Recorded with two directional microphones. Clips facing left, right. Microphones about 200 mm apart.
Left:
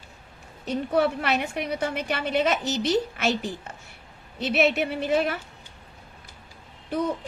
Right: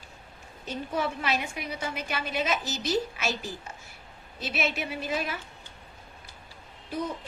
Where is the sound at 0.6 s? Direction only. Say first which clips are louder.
Left 7 dB; 65° left (ahead or behind).